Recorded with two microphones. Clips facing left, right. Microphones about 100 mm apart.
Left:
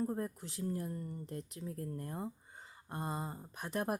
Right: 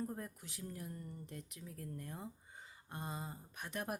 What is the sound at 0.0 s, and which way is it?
Speech, 35° left (ahead or behind).